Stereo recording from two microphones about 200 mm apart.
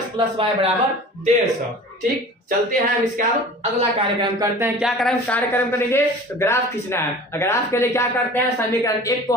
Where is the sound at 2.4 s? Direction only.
45° right (ahead or behind).